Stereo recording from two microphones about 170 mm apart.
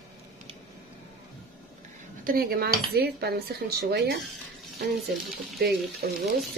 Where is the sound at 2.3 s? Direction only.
60° right (ahead or behind).